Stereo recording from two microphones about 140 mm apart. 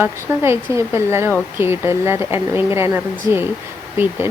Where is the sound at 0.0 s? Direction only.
20° right (ahead or behind).